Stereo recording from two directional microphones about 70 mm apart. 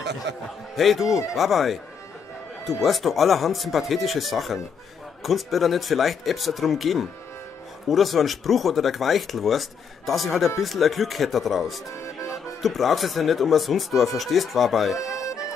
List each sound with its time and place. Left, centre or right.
0.7 s speech: centre